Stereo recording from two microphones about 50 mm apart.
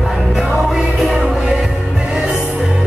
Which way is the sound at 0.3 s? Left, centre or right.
Centre.